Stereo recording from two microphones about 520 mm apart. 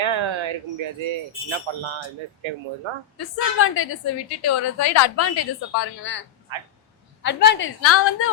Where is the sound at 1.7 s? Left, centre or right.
Right.